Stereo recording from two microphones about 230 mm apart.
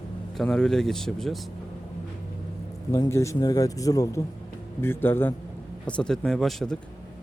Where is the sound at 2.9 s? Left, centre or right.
Centre.